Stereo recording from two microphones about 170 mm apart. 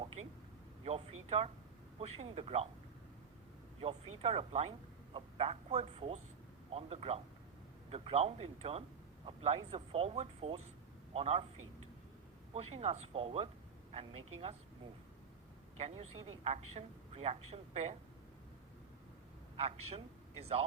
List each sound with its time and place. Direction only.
0.2 s a woman's voice: 45° right (ahead or behind)
3.8 s a woman's voice: 35° right (ahead or behind)
12.5 s a woman's voice: 40° right (ahead or behind)
15.8 s a woman's voice: 40° right (ahead or behind)
19.5 s a man's voice: 40° right (ahead or behind)